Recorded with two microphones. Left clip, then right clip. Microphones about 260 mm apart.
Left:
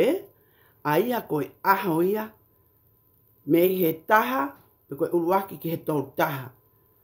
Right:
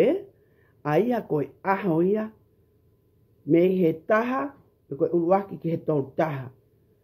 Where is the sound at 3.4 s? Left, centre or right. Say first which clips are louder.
Right 1 dB; centre.